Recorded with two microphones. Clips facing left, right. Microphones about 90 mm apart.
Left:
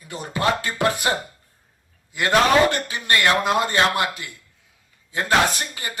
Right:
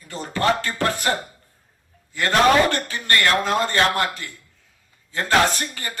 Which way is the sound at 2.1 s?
15° left (ahead or behind).